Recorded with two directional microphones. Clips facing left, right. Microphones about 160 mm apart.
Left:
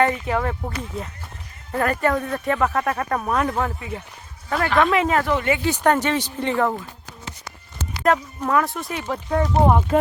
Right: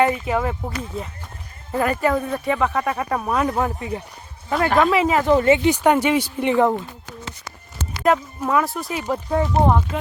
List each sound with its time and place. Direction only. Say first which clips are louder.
0.0 s speech: right 1 dB; 10° right (ahead or behind)
3.8 s speech: right 4 dB; 35° right (ahead or behind)
4.8 s speech: even; 5° right (ahead or behind)
5.3 s speech: right 6 dB; 35° right (ahead or behind)
5.6 s speech: right 3 dB; 10° right (ahead or behind)
8.0 s speech: right 1 dB; 5° right (ahead or behind)
9.9 s speech: left 9 dB; 40° left (ahead or behind)